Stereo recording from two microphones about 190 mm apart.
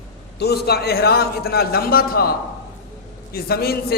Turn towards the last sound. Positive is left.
turn(degrees=55)  # may be behind; listen again after turning